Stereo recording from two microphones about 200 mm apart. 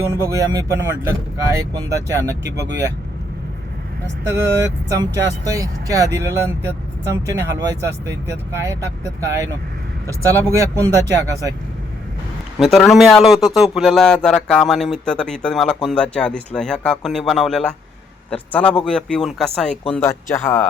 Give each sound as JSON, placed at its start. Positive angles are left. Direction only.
{"t": 0.2, "sound": "speech", "side_deg": -15}
{"t": 4.3, "sound": "speech", "side_deg": -15}
{"t": 12.5, "sound": "a man's voice", "side_deg": 0}